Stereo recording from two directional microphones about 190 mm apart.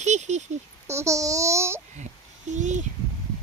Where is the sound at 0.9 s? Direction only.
15° right (ahead or behind).